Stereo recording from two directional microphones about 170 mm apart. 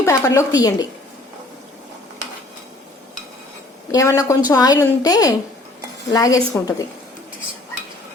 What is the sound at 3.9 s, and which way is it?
A woman's voice, 20° left (ahead or behind).